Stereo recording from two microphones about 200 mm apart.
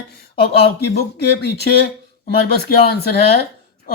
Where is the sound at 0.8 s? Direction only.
55° left (ahead or behind).